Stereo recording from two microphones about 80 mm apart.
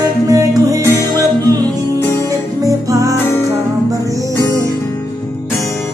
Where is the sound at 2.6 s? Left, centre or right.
Right.